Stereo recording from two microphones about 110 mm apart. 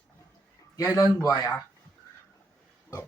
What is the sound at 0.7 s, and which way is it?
Speech, 30° left (ahead or behind).